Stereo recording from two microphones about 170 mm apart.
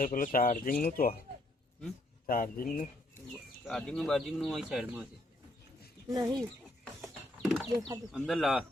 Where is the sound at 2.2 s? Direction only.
55° left (ahead or behind).